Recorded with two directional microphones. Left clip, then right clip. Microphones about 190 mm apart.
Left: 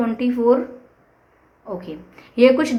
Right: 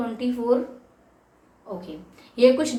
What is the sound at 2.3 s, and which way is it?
Speech, 45° left (ahead or behind).